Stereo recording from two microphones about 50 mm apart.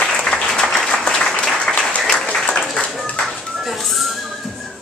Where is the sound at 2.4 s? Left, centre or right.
Centre.